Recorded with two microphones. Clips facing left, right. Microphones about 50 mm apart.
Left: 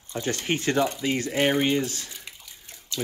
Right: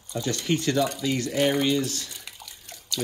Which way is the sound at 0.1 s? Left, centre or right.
Left.